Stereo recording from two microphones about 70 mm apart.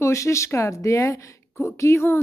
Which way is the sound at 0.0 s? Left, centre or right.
Left.